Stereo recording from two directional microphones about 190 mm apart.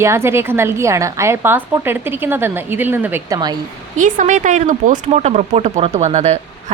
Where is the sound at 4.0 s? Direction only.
40° right (ahead or behind).